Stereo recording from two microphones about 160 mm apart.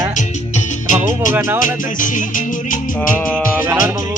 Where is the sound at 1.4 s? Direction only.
15° right (ahead or behind).